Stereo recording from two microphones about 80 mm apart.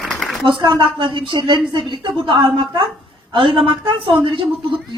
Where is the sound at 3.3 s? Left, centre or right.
Right.